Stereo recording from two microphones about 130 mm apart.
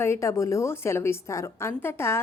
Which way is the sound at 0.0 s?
20° left (ahead or behind).